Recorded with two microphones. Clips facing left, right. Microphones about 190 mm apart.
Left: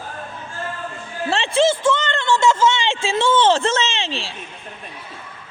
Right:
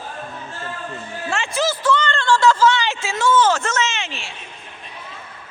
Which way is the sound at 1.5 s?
25° left (ahead or behind).